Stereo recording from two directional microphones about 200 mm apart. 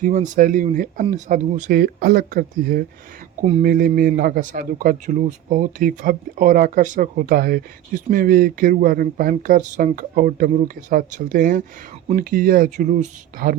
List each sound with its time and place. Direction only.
0.0 s a man's voice: 40° right (ahead or behind)